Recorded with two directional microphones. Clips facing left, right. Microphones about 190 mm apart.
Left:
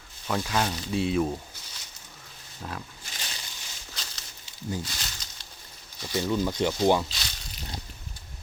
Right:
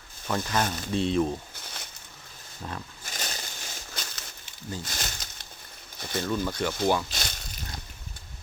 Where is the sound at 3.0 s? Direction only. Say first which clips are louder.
Right 5 dB; 45° right (ahead or behind).